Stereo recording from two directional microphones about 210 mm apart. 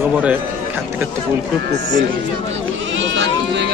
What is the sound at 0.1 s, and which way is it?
Speech, 5° right (ahead or behind).